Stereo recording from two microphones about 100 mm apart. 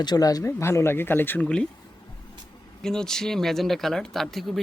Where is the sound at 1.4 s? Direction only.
10° left (ahead or behind).